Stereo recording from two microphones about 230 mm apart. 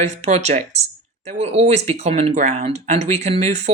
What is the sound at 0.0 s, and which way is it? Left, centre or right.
Speech, right.